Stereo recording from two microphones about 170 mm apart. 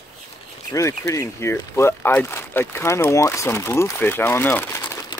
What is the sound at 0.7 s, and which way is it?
Speech, 15° left (ahead or behind).